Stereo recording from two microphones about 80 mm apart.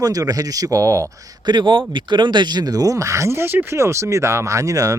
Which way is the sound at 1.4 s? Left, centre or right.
Right.